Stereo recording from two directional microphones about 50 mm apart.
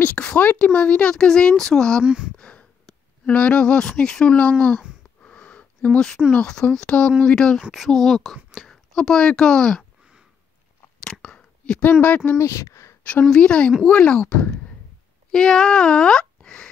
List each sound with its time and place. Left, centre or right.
0.0 s speech: left
2.0 s speech: centre
2.3 s a sound: left
3.3 s speech: left
4.4 s speech: left
5.2 s a sound: left
5.9 s speech: centre
7.7 s speech: centre
11.1 s a sound: centre
11.8 s speech: left
12.4 s speech: left
13.4 s speech: left